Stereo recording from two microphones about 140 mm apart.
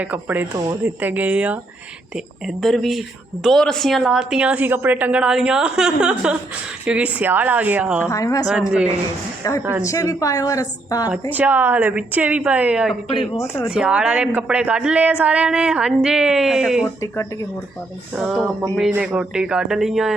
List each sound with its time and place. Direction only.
0.0 s a woman's voice: 10° right (ahead or behind)
8.1 s a woman's voice: 25° left (ahead or behind)
8.4 s a woman's voice: 5° right (ahead or behind)
9.4 s a woman's voice: 25° left (ahead or behind)
11.1 s a woman's voice: 10° right (ahead or behind)
18.1 s a woman's voice: 5° right (ahead or behind)